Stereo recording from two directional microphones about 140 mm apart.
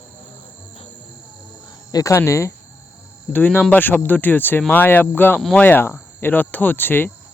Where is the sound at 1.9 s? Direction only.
20° left (ahead or behind).